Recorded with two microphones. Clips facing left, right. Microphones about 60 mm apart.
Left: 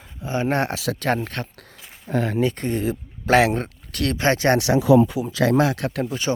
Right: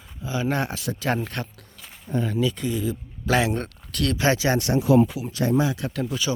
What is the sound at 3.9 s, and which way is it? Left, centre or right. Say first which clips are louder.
Speech: left 1 dB; left.